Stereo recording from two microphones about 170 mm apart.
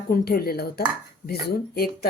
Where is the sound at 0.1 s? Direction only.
65° left (ahead or behind).